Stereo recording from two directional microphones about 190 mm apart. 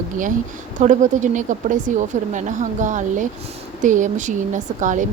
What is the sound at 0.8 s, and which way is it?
A woman's voice, 40° right (ahead or behind).